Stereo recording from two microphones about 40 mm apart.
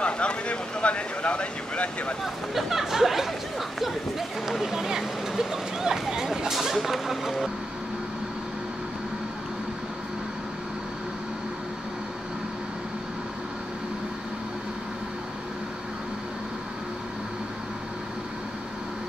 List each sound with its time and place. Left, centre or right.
0.0 s speech: left
2.5 s speech: centre
4.5 s speech: centre